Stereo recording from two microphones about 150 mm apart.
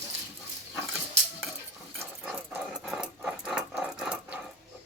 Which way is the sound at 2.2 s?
5° right (ahead or behind).